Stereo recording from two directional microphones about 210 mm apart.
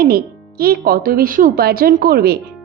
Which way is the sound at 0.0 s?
45° right (ahead or behind).